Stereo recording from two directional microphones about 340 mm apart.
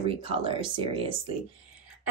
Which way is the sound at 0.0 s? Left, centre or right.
Centre.